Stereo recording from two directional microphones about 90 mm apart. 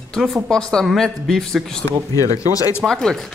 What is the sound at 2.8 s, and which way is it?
Speech, 5° left (ahead or behind).